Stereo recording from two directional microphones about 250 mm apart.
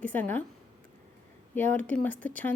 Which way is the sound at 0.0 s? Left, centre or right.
Centre.